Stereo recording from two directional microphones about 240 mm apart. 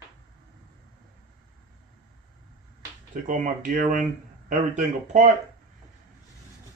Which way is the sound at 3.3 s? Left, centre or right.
Right.